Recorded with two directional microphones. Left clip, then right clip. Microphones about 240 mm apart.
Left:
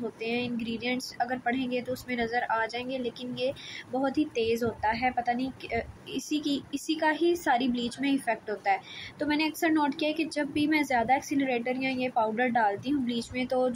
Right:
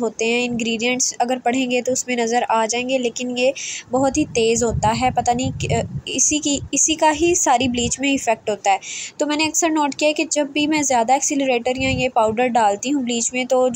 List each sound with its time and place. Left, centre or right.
0.2 s a woman's voice: centre